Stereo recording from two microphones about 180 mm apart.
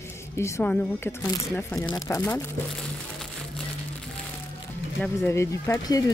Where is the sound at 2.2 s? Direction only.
10° left (ahead or behind).